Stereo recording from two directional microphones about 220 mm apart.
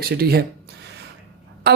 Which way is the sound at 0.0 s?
45° right (ahead or behind).